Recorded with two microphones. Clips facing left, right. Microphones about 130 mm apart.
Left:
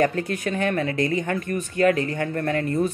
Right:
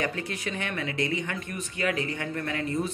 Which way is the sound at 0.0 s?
45° left (ahead or behind).